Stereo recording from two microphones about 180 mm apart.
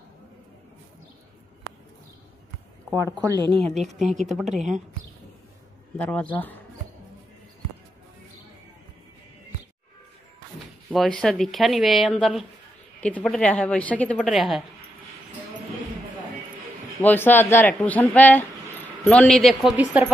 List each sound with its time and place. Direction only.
2.9 s speech: 15° right (ahead or behind); by 3.9 s 35° right (ahead or behind)
4.0 s speech: centre (ahead or behind)
4.5 s speech: 40° right (ahead or behind)
5.9 s speech: 10° left (ahead or behind)
10.9 s speech: centre (ahead or behind)
17.0 s speech: 10° left (ahead or behind); by 20.1 s 10° right (ahead or behind)